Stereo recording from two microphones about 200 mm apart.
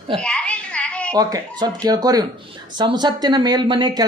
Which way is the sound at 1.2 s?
20° right (ahead or behind).